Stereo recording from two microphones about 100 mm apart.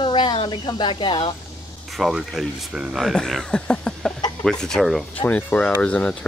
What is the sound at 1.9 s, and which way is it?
Speech, centre (ahead or behind).